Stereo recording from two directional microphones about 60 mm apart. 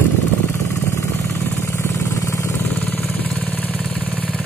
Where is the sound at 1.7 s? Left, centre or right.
Left.